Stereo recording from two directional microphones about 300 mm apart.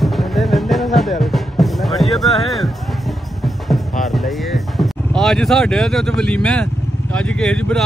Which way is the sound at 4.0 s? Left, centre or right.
Centre.